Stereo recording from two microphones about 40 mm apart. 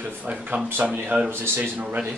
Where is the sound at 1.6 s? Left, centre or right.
Right.